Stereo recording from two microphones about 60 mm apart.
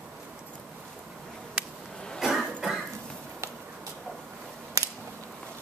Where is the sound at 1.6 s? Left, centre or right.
Centre.